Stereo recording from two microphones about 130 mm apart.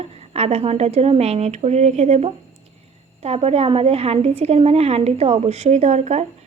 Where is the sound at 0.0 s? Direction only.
50° right (ahead or behind).